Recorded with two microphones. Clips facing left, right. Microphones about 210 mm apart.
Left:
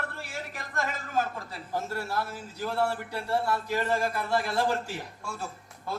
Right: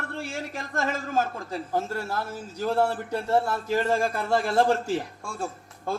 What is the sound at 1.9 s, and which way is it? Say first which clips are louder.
A man's voice: right 2 dB; 45° right (ahead or behind).